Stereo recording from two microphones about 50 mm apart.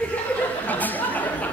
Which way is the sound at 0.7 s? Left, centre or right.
Left.